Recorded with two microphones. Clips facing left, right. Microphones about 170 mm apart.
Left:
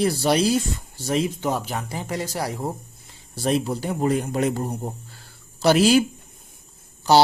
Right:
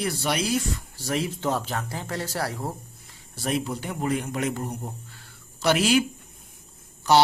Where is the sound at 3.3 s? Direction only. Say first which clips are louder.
Left 5 dB; 30° left (ahead or behind).